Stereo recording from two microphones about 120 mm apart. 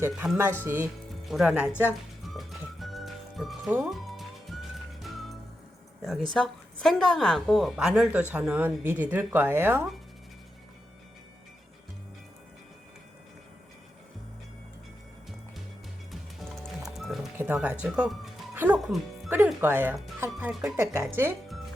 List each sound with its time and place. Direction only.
0.0 s a woman's voice: 20° right (ahead or behind)
1.3 s a woman's voice: 5° right (ahead or behind)
2.2 s music: centre (ahead or behind)
6.3 s a woman's voice: 5° left (ahead or behind); by 9.8 s 20° right (ahead or behind)
16.4 s music: centre (ahead or behind)
17.3 s a woman's voice: 15° right (ahead or behind)
20.5 s speech: 5° right (ahead or behind)
20.7 s speech: 25° right (ahead or behind)